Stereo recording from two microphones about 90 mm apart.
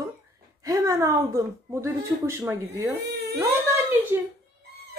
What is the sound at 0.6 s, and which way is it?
Speech, 35° right (ahead or behind).